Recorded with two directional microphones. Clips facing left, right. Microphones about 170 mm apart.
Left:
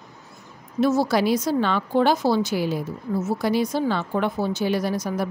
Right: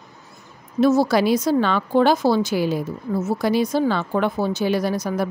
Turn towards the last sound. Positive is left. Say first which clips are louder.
# right 2 dB
turn(degrees=-90)